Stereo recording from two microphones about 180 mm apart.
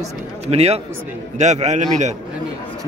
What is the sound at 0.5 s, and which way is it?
A man's voice, 35° right (ahead or behind).